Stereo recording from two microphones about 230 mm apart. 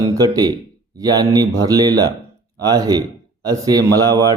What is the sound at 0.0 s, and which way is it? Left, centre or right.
A man's voice, centre.